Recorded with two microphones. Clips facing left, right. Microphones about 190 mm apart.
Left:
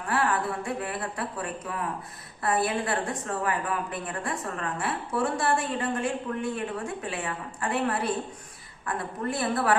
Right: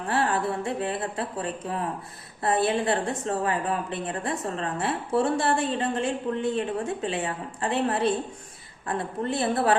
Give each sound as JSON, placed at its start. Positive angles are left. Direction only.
{"t": 0.1, "sound": "a woman's voice", "side_deg": -30}